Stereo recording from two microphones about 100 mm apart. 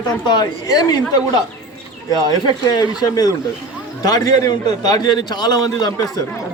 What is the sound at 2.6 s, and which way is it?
A man's voice, 40° left (ahead or behind).